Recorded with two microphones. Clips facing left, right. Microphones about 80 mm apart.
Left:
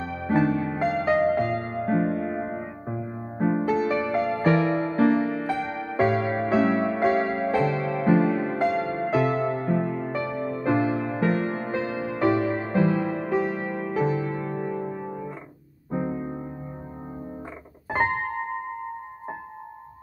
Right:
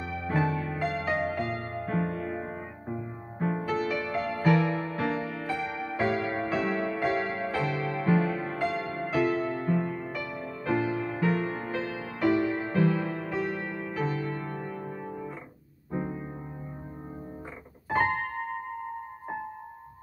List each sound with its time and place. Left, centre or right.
0.6 s music: left
9.1 s music: left
10.0 s music: left
10.7 s music: left
11.4 s music: left
12.3 s music: left
15.9 s music: centre